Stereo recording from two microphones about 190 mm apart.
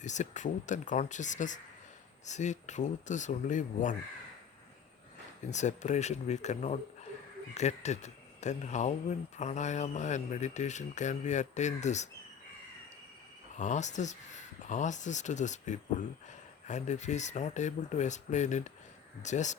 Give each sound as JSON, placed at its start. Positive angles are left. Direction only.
{"t": 0.0, "sound": "speech", "side_deg": 40}
{"t": 5.5, "sound": "speech", "side_deg": 40}
{"t": 13.6, "sound": "speech", "side_deg": 40}